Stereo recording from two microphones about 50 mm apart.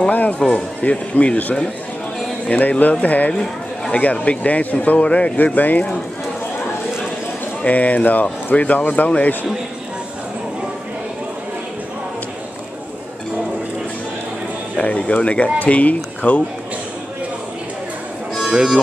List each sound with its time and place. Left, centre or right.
0.1 s speech: left
5.4 s speech: left
7.6 s speech: left
14.8 s speech: left
18.4 s speech: centre